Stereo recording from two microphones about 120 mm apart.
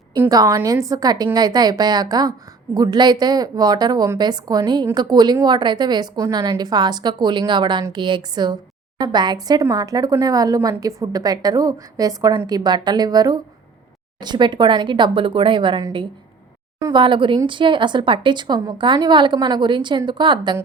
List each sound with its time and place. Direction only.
0.3 s a woman's voice: 30° right (ahead or behind)